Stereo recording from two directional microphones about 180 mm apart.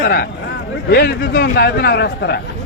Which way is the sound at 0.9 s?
65° left (ahead or behind).